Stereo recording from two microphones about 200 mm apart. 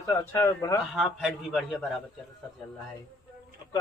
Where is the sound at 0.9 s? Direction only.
Centre (ahead or behind).